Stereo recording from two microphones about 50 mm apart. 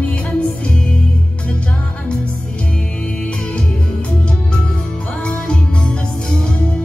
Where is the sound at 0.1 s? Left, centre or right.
Left.